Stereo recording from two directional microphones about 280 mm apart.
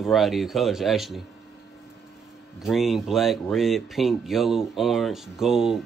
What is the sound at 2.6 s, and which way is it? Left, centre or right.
Speech, centre.